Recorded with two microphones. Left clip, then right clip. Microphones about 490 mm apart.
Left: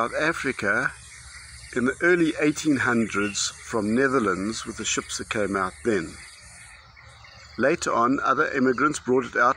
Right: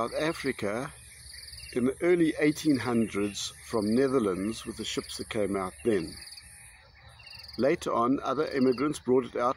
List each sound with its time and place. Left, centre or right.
0.0 s speech: right
7.5 s speech: right